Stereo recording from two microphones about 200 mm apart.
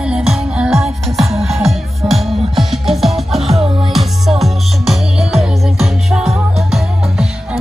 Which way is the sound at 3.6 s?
25° right (ahead or behind).